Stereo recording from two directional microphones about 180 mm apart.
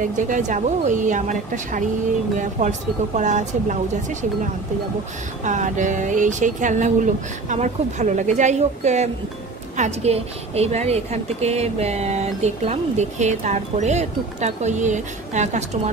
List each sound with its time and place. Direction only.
0.0 s a woman's voice: 45° right (ahead or behind)
5.4 s a woman's voice: 45° right (ahead or behind)